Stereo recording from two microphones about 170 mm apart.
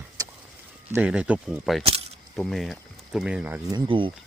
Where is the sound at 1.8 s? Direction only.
35° right (ahead or behind).